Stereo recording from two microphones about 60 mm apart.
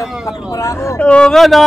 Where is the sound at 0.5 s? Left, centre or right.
Left.